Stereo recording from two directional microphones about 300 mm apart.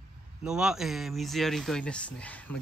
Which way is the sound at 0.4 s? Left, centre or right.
Centre.